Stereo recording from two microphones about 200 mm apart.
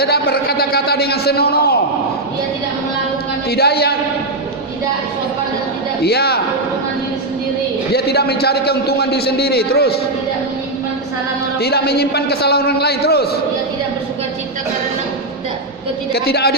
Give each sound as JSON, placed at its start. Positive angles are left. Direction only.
{"t": 0.0, "sound": "a man's voice", "side_deg": 50}
{"t": 3.5, "sound": "a man's voice", "side_deg": 50}
{"t": 6.0, "sound": "a man's voice", "side_deg": 55}
{"t": 7.9, "sound": "a man's voice", "side_deg": 55}
{"t": 11.6, "sound": "a man's voice", "side_deg": 55}
{"t": 16.1, "sound": "a man's voice", "side_deg": 50}